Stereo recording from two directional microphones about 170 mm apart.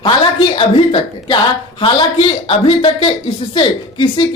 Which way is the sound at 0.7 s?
30° left (ahead or behind).